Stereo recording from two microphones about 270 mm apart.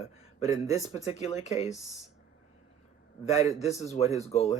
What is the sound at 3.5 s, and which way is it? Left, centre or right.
Speech, left.